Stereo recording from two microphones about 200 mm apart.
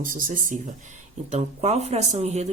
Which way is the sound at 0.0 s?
45° right (ahead or behind).